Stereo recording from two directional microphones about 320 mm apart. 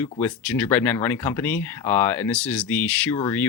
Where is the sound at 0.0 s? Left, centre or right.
Centre.